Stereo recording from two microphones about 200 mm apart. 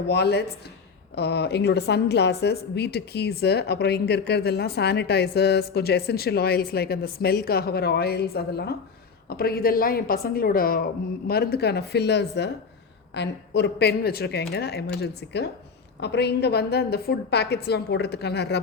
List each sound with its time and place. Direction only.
0.1 s a woman's voice: 55° left (ahead or behind)